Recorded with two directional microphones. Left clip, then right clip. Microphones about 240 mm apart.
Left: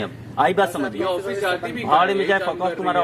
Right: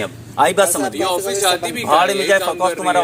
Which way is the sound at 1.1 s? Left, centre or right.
Centre.